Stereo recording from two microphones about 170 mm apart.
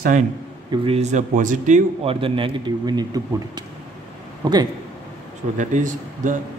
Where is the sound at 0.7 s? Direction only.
35° right (ahead or behind).